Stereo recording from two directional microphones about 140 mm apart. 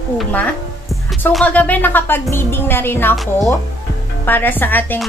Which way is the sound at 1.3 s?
10° left (ahead or behind).